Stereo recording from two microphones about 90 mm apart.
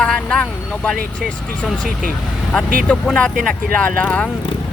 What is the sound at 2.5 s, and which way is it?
Speech, 10° left (ahead or behind).